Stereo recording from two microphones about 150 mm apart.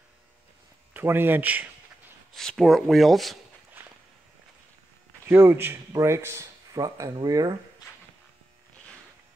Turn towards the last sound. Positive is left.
turn(degrees=-25)  # may be behind; listen again after turning